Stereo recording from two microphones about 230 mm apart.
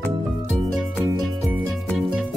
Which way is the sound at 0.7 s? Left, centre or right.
Centre.